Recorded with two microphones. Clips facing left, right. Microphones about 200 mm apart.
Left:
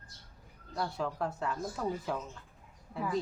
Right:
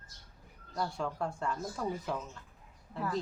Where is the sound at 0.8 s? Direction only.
5° left (ahead or behind).